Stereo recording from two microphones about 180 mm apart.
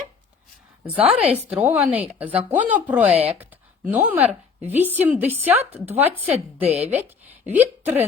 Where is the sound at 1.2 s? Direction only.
5° right (ahead or behind).